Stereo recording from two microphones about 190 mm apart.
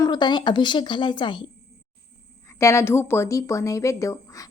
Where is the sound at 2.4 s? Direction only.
15° left (ahead or behind).